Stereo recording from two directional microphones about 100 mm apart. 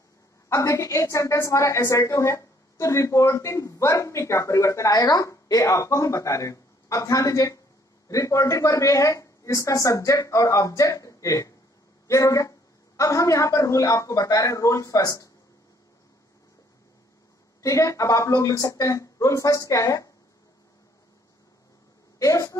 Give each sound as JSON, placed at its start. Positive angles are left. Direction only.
{"t": 0.5, "sound": "a woman's voice", "side_deg": 30}
{"t": 17.6, "sound": "a woman's voice", "side_deg": 30}
{"t": 22.2, "sound": "a woman's voice", "side_deg": 35}